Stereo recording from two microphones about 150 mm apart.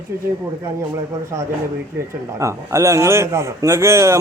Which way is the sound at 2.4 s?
20° right (ahead or behind).